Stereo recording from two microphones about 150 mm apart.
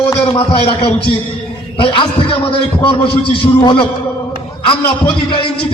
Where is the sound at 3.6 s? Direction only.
35° left (ahead or behind).